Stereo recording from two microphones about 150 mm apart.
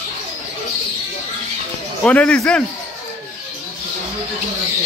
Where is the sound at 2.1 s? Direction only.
10° left (ahead or behind).